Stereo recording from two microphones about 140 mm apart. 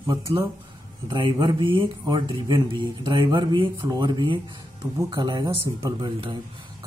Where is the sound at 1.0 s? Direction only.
30° right (ahead or behind).